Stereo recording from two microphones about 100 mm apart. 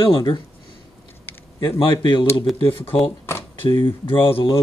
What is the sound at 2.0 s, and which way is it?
Speech, 55° left (ahead or behind).